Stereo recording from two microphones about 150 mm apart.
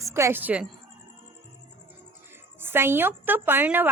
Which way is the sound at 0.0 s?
20° right (ahead or behind).